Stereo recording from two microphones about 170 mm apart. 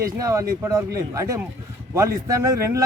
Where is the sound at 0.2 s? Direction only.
20° right (ahead or behind).